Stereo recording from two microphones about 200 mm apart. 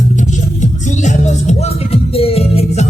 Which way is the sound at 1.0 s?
35° left (ahead or behind).